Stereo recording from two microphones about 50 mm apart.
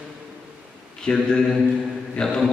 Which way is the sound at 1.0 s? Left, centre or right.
Centre.